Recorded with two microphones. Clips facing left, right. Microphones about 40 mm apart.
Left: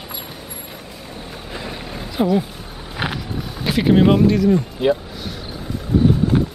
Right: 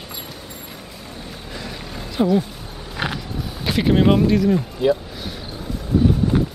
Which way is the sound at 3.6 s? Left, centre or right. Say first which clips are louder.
Left 2 dB; centre.